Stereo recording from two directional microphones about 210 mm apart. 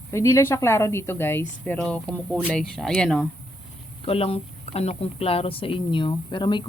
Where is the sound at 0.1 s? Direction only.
15° left (ahead or behind).